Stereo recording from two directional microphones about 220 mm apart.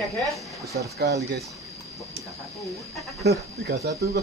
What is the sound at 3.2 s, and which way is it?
Speech, 45° right (ahead or behind).